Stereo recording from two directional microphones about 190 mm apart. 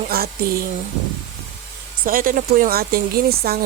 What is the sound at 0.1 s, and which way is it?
Speech, 50° right (ahead or behind).